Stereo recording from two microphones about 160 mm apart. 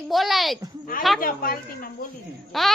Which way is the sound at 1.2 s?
65° left (ahead or behind).